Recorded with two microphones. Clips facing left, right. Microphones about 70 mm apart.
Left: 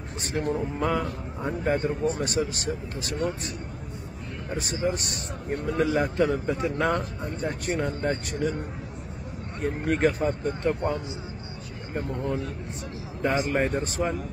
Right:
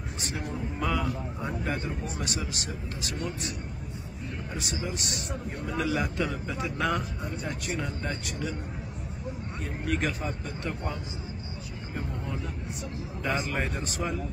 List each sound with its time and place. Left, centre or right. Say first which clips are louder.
0.2 s a man's voice: left 8 dB; left
4.6 s a man's voice: left 8 dB; left
9.6 s speech: left 7 dB; left
13.2 s a man's voice: left 6 dB; left